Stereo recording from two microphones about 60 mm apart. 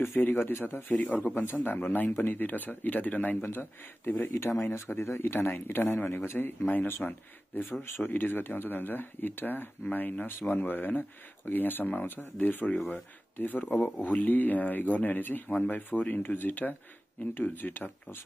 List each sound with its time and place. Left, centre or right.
0.0 s speech: left